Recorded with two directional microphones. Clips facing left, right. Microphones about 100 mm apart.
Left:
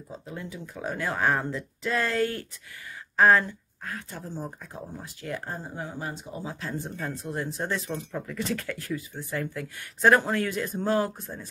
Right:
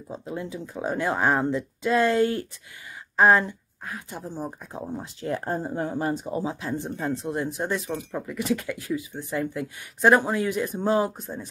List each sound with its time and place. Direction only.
0.2 s speech: 25° right (ahead or behind)
4.8 s speech: 25° right (ahead or behind)
5.4 s speech: 40° right (ahead or behind)
6.4 s speech: 20° right (ahead or behind)